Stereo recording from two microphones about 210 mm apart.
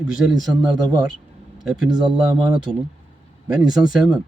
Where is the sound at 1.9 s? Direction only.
20° right (ahead or behind).